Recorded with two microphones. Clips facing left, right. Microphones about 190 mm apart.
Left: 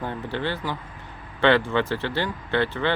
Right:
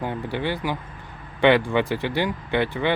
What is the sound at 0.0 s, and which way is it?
Speech, 15° right (ahead or behind).